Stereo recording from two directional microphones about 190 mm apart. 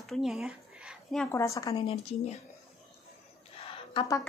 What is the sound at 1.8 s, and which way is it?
Speech, 30° left (ahead or behind).